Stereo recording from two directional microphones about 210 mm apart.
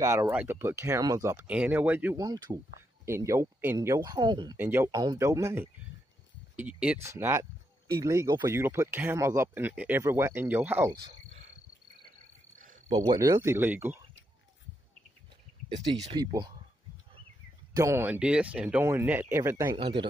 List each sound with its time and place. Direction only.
0.0 s speech: 15° right (ahead or behind)
4.6 s speech: 10° right (ahead or behind)
6.8 s speech: 10° right (ahead or behind)
12.5 s cricket: 40° right (ahead or behind)
12.9 s speech: 20° right (ahead or behind)
16.2 s speech: 20° right (ahead or behind)
17.7 s speech: 10° right (ahead or behind)